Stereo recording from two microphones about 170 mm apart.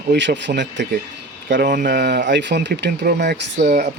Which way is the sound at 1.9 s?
80° right.